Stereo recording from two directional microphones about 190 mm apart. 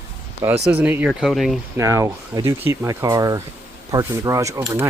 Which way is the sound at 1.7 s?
15° right (ahead or behind).